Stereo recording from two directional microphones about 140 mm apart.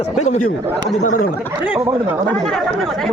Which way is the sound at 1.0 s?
85° left.